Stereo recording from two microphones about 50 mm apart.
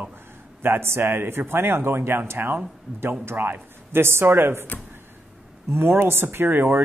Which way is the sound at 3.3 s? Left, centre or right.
Right.